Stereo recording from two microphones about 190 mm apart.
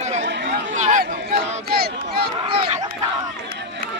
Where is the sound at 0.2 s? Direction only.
65° right (ahead or behind).